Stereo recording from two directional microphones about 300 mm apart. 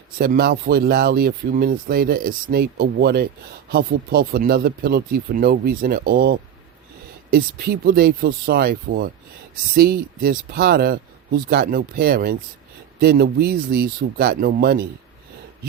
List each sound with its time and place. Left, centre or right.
0.2 s speech: right